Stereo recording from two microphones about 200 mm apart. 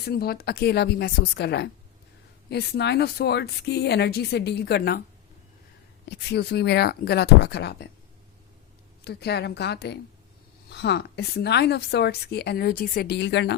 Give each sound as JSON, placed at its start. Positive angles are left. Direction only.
{"t": 0.0, "sound": "a woman's voice", "side_deg": 50}
{"t": 6.1, "sound": "a woman's voice", "side_deg": 55}
{"t": 9.0, "sound": "a woman's voice", "side_deg": 55}